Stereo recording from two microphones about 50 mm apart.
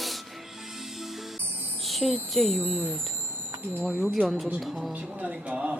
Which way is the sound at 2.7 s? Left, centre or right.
Right.